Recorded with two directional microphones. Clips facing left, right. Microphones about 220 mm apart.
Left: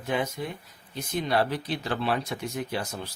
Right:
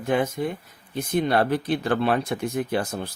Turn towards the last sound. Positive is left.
turn(degrees=-50)  # may be behind; listen again after turning